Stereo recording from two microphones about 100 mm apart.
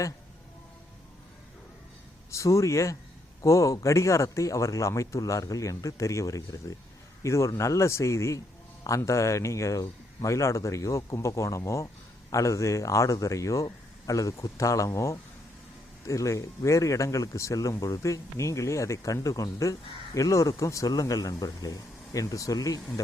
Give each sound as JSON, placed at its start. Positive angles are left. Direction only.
{"t": 2.3, "sound": "speech", "side_deg": 30}